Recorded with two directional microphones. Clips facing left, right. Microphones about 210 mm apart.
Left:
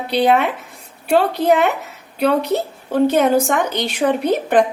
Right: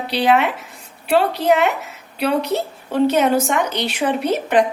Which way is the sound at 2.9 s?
50° left (ahead or behind).